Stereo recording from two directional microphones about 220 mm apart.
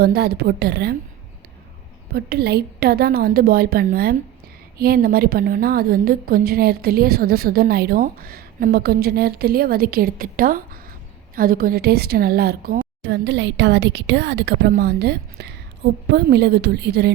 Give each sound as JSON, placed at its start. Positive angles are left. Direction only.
{"t": 0.0, "sound": "a woman's voice", "side_deg": -45}
{"t": 2.1, "sound": "a woman's voice", "side_deg": -45}